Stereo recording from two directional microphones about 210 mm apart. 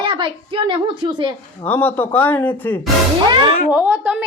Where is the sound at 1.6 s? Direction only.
10° left (ahead or behind).